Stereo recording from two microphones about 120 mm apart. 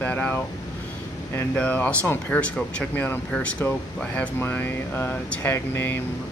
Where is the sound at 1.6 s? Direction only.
10° left (ahead or behind).